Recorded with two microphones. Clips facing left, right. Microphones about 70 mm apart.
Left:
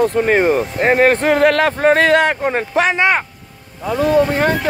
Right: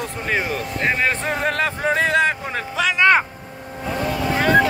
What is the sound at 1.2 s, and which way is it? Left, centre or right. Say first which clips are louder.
Speech: left 9 dB; left.